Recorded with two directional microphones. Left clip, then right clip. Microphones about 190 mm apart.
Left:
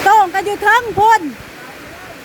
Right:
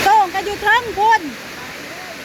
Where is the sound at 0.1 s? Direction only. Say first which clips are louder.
Left 5 dB; 35° left (ahead or behind).